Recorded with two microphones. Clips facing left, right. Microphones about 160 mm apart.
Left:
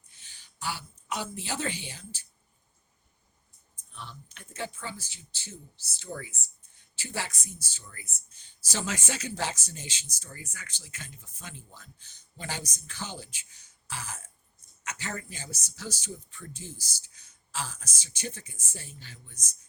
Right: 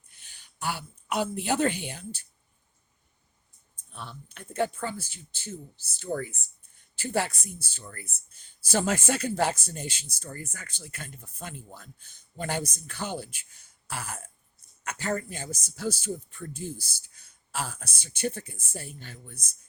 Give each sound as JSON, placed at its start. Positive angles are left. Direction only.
{"t": 0.6, "sound": "speech", "side_deg": -55}
{"t": 3.9, "sound": "speech", "side_deg": -60}
{"t": 13.8, "sound": "throat clearing", "side_deg": -60}
{"t": 14.8, "sound": "speech", "side_deg": -45}